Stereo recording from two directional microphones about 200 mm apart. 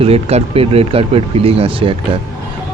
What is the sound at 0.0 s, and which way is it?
Speech, 30° right (ahead or behind).